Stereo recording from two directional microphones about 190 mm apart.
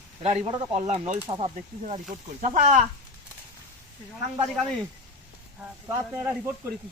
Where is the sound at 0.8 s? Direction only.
35° right (ahead or behind).